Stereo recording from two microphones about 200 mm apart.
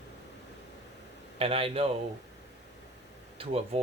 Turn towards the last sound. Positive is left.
turn(degrees=-30)  # may be behind; listen again after turning